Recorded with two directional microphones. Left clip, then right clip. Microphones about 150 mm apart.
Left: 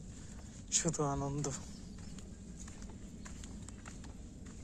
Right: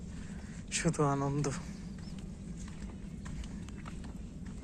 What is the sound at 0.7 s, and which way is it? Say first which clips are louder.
Speech: right 4 dB; 10° left (ahead or behind).